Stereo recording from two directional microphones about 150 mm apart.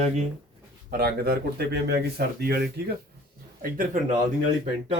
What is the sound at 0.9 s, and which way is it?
Speech, 90° right.